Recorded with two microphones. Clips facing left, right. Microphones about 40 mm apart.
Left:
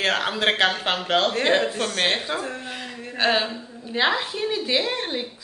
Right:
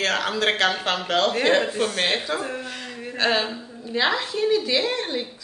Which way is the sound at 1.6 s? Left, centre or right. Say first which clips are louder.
Right 1 dB; centre.